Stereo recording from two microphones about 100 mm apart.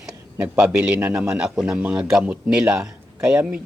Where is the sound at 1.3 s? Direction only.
5° right (ahead or behind).